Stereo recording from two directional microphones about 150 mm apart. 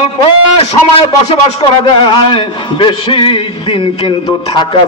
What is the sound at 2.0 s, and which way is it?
A man's voice, 30° left (ahead or behind).